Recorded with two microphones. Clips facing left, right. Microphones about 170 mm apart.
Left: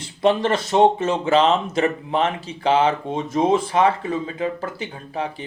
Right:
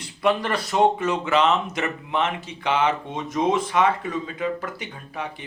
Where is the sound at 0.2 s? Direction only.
25° left (ahead or behind).